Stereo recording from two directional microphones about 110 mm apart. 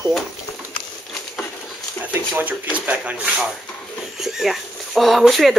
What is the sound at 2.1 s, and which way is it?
Speech, 20° right (ahead or behind).